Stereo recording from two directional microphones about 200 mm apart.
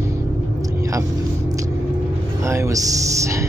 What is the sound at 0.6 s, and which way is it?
Vehicle, 15° right (ahead or behind).